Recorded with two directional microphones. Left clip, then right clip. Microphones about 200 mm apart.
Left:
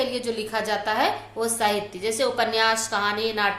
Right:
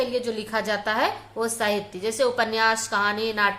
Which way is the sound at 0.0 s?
15° right (ahead or behind).